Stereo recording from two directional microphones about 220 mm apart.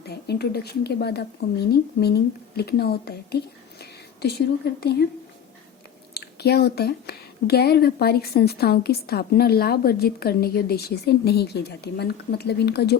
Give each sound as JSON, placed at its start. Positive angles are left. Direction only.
{"t": 0.1, "sound": "a woman's voice", "side_deg": 45}
{"t": 6.1, "sound": "a woman's voice", "side_deg": 45}